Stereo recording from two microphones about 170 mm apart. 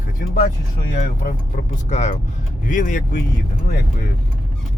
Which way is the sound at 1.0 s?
45° left (ahead or behind).